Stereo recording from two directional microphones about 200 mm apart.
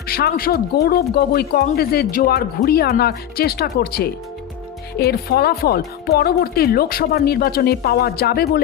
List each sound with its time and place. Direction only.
0.1 s speech: 50° left (ahead or behind)